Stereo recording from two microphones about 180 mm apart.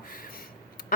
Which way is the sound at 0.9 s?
50° left (ahead or behind).